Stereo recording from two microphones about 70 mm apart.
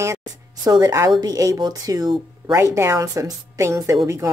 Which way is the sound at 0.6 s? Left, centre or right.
Right.